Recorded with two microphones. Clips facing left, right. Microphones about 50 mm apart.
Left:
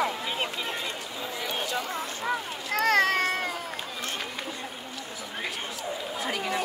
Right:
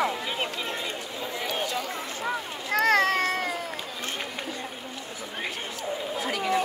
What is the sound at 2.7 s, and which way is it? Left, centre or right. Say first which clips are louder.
Boat: right 1 dB; right.